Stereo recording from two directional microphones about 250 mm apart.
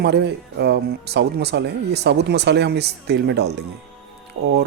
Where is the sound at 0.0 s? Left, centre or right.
Right.